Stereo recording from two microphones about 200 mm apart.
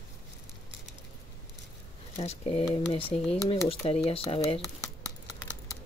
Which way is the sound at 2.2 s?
30° left (ahead or behind).